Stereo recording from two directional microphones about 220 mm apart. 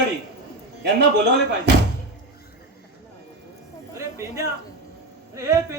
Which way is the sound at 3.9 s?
15° right (ahead or behind).